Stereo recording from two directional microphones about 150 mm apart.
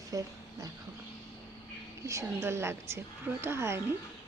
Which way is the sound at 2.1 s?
20° right (ahead or behind).